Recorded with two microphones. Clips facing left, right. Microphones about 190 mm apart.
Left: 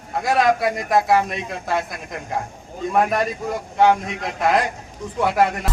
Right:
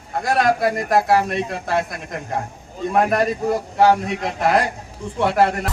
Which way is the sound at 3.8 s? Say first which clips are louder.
Right 1 dB; 35° right (ahead or behind).